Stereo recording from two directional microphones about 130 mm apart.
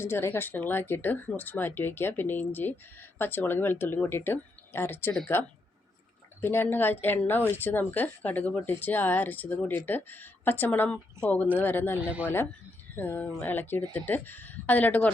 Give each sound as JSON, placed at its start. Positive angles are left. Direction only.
{"t": 0.0, "sound": "speech", "side_deg": 20}
{"t": 6.4, "sound": "speech", "side_deg": 15}
{"t": 11.9, "sound": "speech", "side_deg": -10}
{"t": 12.2, "sound": "speech", "side_deg": 15}